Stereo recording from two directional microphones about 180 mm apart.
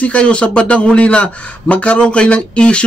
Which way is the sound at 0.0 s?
5° left (ahead or behind).